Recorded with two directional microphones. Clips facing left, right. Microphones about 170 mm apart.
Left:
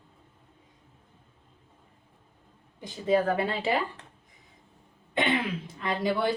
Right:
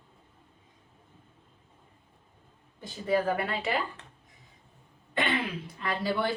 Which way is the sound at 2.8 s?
25° left (ahead or behind).